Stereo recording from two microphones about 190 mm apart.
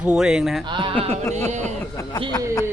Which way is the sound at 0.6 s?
25° right (ahead or behind).